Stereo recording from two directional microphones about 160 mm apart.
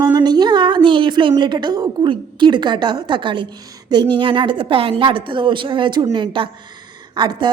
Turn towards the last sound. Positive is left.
turn(degrees=-25)  # may be behind; listen again after turning